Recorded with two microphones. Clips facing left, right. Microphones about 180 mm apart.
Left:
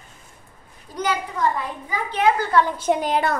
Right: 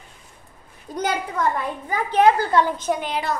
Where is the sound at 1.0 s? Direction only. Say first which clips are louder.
Even; 50° right (ahead or behind).